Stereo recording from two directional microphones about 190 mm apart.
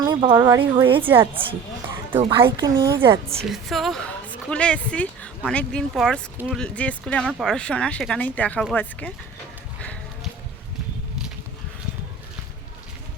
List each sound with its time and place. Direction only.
0.0 s a sound: 20° right (ahead or behind)
0.3 s a woman's voice: 15° right (ahead or behind)
0.6 s a woman's voice: 25° right (ahead or behind)
1.0 s a woman's voice: 10° right (ahead or behind)
2.4 s a woman's voice: 20° right (ahead or behind)
3.5 s a woman's voice: centre (ahead or behind)